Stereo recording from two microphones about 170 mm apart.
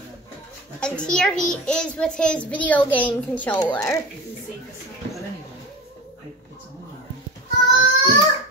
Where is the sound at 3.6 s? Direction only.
20° left (ahead or behind).